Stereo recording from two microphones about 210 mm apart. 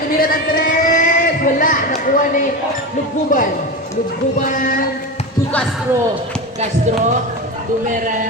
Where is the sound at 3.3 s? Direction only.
40° left (ahead or behind).